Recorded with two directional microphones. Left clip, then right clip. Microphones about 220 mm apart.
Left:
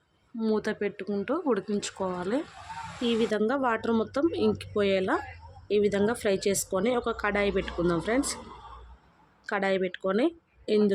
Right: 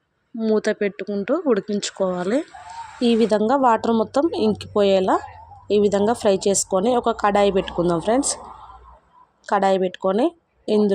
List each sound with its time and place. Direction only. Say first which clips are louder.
0.3 s speech: right 8 dB; 15° right (ahead or behind)
9.5 s speech: right 9 dB; 15° right (ahead or behind)